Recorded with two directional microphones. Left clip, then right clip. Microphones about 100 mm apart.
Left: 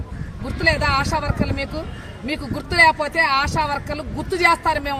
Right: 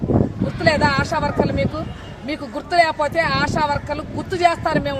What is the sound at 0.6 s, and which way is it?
Speech, 35° right (ahead or behind).